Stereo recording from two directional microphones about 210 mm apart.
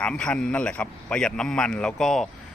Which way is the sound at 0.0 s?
5° left (ahead or behind).